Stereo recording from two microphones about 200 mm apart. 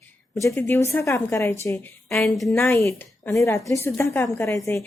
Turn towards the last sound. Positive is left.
turn(degrees=15)  # may be behind; listen again after turning